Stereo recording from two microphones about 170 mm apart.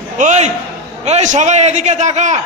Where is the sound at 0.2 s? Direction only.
45° right (ahead or behind).